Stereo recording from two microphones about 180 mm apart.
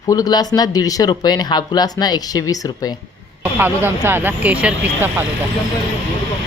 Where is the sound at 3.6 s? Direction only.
10° right (ahead or behind).